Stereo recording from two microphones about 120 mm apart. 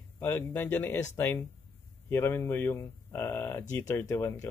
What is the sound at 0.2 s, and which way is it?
A man's voice, 20° left (ahead or behind).